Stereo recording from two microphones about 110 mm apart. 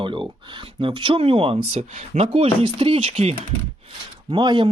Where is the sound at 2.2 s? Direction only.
60° right (ahead or behind).